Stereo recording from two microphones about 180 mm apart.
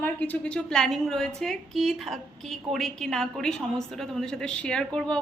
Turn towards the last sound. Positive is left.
turn(degrees=5)  # may be behind; listen again after turning